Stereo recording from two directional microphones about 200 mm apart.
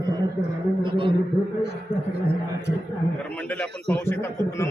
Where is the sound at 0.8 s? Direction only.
25° right (ahead or behind).